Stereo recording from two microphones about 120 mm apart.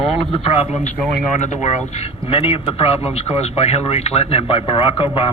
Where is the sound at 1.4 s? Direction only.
70° left (ahead or behind).